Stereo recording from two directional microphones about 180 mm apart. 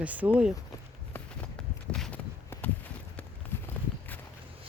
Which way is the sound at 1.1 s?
5° left (ahead or behind).